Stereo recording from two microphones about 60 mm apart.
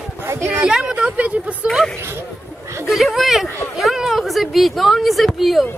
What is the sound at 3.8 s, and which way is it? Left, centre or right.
Speech, centre.